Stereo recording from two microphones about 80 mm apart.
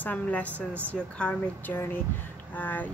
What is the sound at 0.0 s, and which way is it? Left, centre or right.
Speech, centre.